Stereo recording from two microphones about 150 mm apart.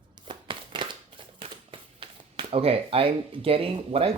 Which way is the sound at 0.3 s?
35° right (ahead or behind).